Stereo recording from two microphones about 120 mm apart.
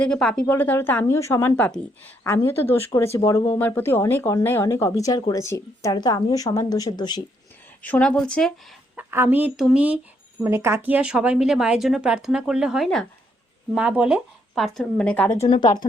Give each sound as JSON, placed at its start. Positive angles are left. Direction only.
{"t": 0.0, "sound": "a woman's voice", "side_deg": 5}
{"t": 0.4, "sound": "a woman's voice", "side_deg": 15}
{"t": 7.8, "sound": "a woman's voice", "side_deg": 10}
{"t": 9.0, "sound": "speech", "side_deg": -20}
{"t": 10.4, "sound": "speech", "side_deg": -20}
{"t": 13.7, "sound": "speech", "side_deg": -10}
{"t": 14.5, "sound": "a woman's voice", "side_deg": 0}
{"t": 15.6, "sound": "speech", "side_deg": 35}